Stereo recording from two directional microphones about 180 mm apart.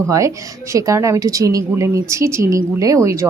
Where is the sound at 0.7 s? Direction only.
15° right (ahead or behind).